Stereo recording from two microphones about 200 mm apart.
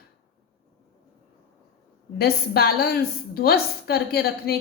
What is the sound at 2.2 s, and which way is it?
A woman's voice, 50° left (ahead or behind).